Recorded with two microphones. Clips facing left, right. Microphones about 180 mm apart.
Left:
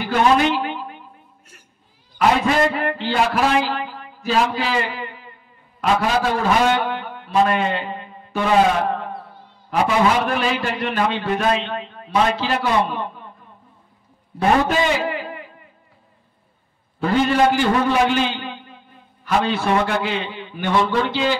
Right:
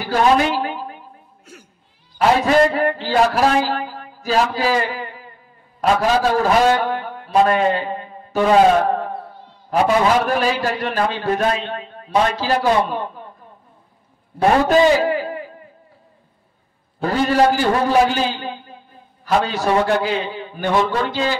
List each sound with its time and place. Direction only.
0.0 s a sound: 35° right (ahead or behind)
2.1 s a man's voice: 40° right (ahead or behind)
10.2 s a man's voice: 40° right (ahead or behind)
14.7 s a man's voice: 40° right (ahead or behind)
17.0 s a man's voice: 40° right (ahead or behind)